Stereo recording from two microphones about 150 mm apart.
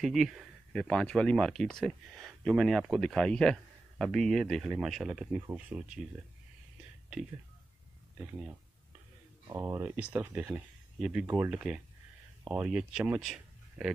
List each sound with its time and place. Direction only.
0.0 s speech: centre (ahead or behind)
8.2 s speech: 10° right (ahead or behind)